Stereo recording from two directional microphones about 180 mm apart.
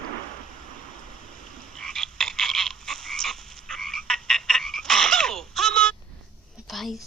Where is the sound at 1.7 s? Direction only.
5° left (ahead or behind).